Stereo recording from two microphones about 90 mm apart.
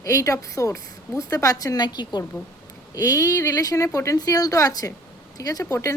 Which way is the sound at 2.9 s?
40° left (ahead or behind).